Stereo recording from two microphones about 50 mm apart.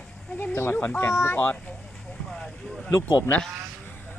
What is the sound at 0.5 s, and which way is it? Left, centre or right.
Speech, left.